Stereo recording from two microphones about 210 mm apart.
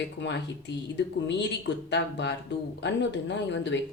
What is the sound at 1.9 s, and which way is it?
Speech, 55° left (ahead or behind).